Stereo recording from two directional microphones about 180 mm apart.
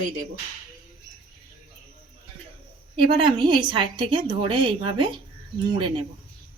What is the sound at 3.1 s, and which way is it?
A woman's voice, 25° right (ahead or behind).